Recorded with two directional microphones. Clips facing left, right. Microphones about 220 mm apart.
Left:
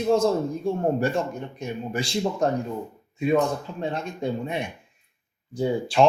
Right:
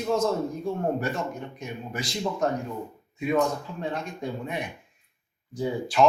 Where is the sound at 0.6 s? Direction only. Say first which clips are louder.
Left 4 dB; 30° left (ahead or behind).